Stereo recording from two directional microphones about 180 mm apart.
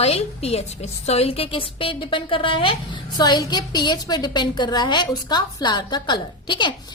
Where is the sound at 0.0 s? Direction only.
35° left (ahead or behind).